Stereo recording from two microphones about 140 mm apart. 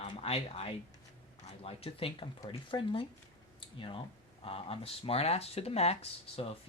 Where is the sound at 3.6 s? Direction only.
40° left (ahead or behind).